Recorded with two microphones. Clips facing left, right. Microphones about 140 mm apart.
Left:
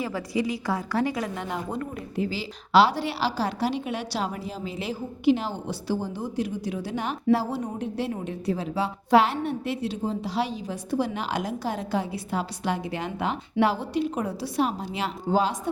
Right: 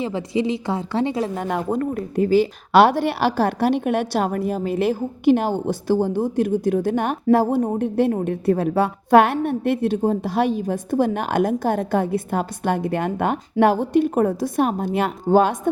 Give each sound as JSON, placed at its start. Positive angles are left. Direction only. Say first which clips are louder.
{"t": 0.0, "sound": "a woman's voice", "louder": "right 5 dB", "side_deg": -25}
{"t": 1.4, "sound": "speech", "louder": "right 8 dB", "side_deg": -50}